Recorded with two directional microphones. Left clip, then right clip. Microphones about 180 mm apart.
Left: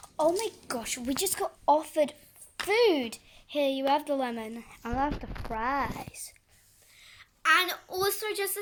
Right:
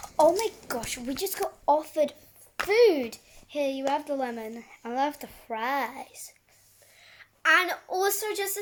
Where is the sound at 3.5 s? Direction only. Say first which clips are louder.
Left 1 dB; 50° left (ahead or behind).